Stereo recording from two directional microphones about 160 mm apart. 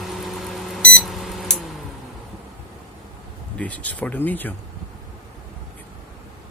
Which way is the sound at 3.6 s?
10° left (ahead or behind).